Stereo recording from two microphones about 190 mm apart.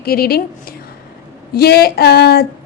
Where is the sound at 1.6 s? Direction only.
55° left (ahead or behind).